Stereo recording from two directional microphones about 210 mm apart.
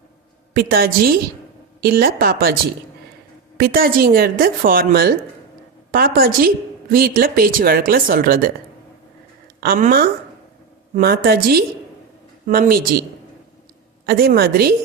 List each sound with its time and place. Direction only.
0.5 s speech: 45° right (ahead or behind)
3.6 s speech: 45° right (ahead or behind)
9.6 s speech: 40° right (ahead or behind)